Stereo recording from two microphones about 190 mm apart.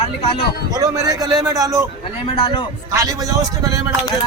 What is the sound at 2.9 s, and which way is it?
Speech, 15° right (ahead or behind).